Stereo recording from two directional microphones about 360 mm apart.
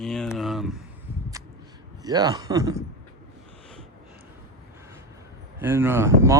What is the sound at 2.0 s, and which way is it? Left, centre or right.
Speech, centre.